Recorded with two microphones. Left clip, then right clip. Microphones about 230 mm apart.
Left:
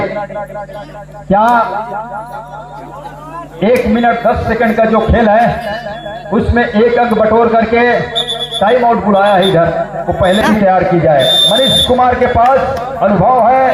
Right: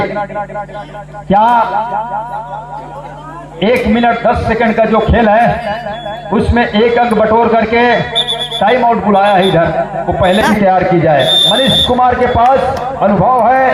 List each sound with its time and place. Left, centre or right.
1.3 s a man's voice: right
3.6 s a man's voice: right